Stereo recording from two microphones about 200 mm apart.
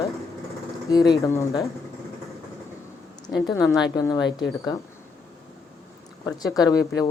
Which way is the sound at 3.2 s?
20° left (ahead or behind).